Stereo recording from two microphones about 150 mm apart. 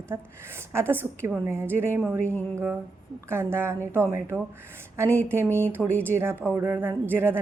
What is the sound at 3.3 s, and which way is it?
Speech, 15° right (ahead or behind).